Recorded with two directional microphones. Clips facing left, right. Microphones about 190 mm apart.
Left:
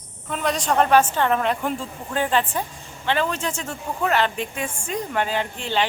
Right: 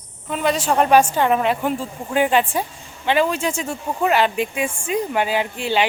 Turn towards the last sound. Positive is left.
turn(degrees=-10)  # may be behind; listen again after turning